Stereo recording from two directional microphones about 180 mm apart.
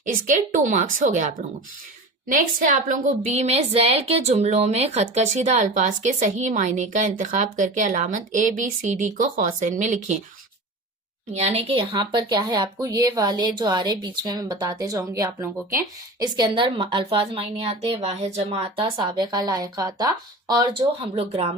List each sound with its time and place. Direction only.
0.1 s a woman's voice: 45° right (ahead or behind)
11.3 s speech: 35° right (ahead or behind)
18.9 s speech: 25° right (ahead or behind)